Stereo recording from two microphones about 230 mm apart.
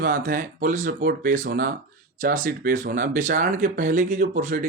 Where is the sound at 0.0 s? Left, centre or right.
Right.